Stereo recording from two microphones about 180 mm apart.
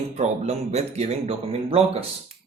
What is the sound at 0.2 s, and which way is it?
Speech, 35° right (ahead or behind).